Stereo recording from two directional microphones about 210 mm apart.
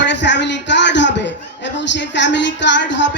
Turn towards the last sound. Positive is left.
turn(degrees=60)  # may be behind; listen again after turning